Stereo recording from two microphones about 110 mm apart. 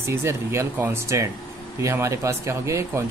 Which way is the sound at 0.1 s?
25° right (ahead or behind).